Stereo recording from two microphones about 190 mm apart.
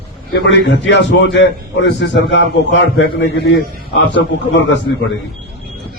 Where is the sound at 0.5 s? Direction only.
70° left (ahead or behind).